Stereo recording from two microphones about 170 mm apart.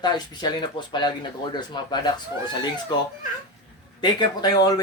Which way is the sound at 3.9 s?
25° left (ahead or behind).